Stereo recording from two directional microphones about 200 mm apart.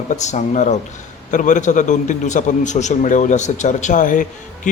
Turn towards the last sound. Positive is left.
turn(degrees=40)  # may be behind; listen again after turning